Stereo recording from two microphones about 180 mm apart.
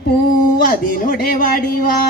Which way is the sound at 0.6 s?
50° left (ahead or behind).